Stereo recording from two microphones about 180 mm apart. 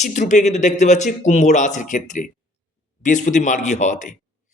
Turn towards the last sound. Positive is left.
turn(degrees=45)  # may be behind; listen again after turning